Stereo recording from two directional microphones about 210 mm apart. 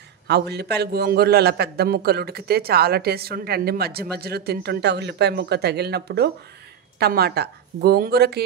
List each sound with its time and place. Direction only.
0.3 s a man's voice: 50° right (ahead or behind)